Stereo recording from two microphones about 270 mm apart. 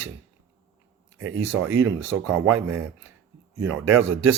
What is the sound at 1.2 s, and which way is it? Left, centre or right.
Speech, right.